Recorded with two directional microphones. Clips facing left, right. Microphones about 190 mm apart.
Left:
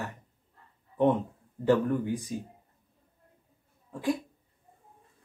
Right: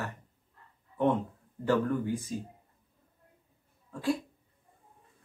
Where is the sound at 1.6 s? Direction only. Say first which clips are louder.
Left 3 dB; 15° left (ahead or behind).